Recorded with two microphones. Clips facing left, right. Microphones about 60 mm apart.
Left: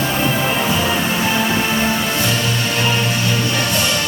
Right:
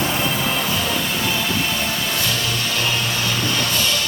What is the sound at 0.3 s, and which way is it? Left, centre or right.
Music, left.